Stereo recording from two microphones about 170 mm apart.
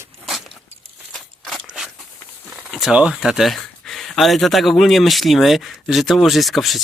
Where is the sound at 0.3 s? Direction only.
Centre (ahead or behind).